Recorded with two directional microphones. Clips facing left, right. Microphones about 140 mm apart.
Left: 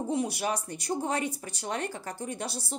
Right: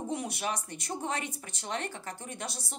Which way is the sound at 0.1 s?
35° left (ahead or behind).